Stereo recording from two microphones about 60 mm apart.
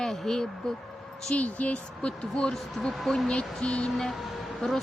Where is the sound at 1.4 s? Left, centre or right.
Left; by 4.8 s centre.